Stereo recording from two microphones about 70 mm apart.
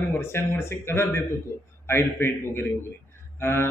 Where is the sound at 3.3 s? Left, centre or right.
Left.